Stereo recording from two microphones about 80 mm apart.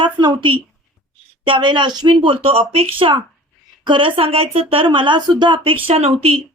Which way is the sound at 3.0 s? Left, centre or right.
Right.